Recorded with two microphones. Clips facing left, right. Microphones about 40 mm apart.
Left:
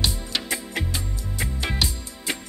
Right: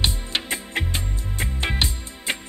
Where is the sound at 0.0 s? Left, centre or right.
Right.